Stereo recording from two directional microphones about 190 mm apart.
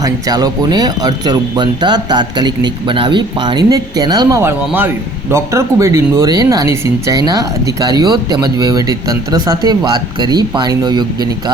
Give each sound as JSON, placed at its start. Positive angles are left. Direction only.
{"t": 0.0, "sound": "speech", "side_deg": -20}